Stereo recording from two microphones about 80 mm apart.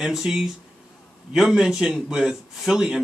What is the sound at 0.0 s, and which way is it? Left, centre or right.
A man's voice, centre.